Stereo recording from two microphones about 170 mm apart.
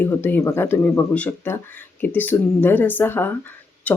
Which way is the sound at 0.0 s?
10° left (ahead or behind).